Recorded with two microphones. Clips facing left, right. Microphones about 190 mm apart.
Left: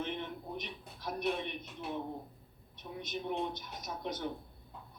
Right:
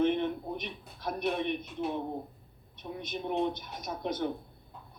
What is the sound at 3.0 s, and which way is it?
A woman's voice, 55° right (ahead or behind).